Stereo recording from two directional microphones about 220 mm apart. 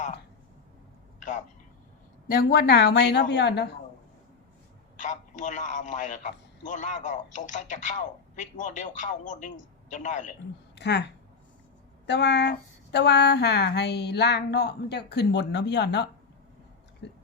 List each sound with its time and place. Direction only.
2.2 s a woman's voice: 40° left (ahead or behind)
4.9 s a man's voice: 35° left (ahead or behind)
10.8 s a woman's voice: 50° left (ahead or behind)
17.0 s a sound: 50° left (ahead or behind)